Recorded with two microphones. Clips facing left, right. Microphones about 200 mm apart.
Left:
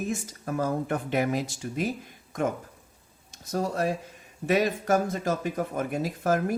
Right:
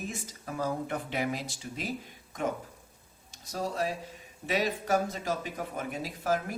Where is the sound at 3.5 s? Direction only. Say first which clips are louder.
Left 5 dB; 50° left (ahead or behind).